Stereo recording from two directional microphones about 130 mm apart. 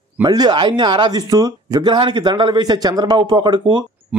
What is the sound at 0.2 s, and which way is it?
Speech, 30° right (ahead or behind).